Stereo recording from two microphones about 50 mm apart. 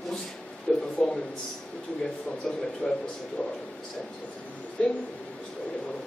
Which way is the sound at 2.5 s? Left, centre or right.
Centre.